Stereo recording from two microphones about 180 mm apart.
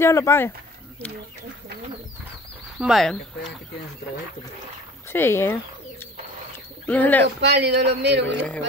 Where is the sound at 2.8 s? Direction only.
Centre (ahead or behind).